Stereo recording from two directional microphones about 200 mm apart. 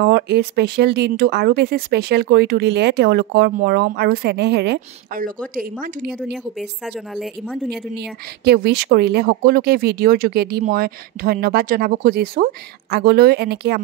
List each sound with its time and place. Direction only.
0.0 s speech: 55° right (ahead or behind)
5.5 s speech: 45° right (ahead or behind)
6.3 s a woman's voice: centre (ahead or behind)
7.9 s speech: 55° right (ahead or behind)